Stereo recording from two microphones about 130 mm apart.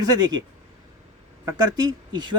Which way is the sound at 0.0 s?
30° right (ahead or behind).